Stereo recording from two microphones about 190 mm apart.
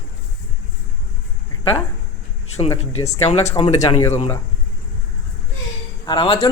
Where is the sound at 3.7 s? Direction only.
15° left (ahead or behind).